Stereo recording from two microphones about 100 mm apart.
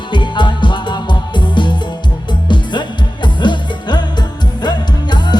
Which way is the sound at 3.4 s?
50° left (ahead or behind).